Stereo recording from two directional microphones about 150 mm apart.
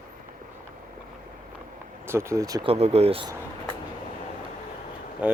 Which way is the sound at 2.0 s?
15° right (ahead or behind).